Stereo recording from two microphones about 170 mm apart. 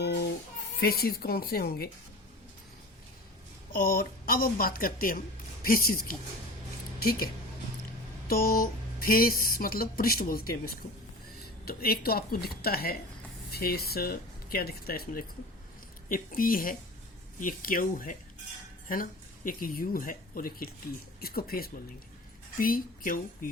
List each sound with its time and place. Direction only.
0.0 s a sound: 75° left (ahead or behind)
0.8 s speech: 65° left (ahead or behind)
3.7 s speech: 60° left (ahead or behind)
8.3 s speech: 60° left (ahead or behind)
11.6 s speech: 65° left (ahead or behind)
19.5 s speech: 55° left (ahead or behind)